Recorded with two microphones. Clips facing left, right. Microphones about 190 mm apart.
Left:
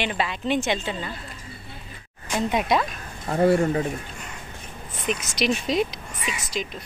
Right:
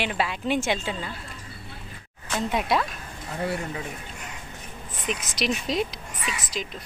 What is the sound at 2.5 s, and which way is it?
Speech, centre (ahead or behind).